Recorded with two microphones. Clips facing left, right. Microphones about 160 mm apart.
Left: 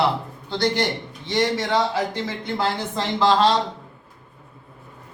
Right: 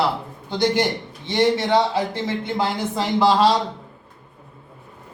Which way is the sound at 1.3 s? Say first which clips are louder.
Right 3 dB; 25° right (ahead or behind).